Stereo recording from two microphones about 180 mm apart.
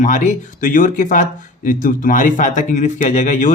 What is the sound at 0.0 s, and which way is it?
Speech, 45° left (ahead or behind).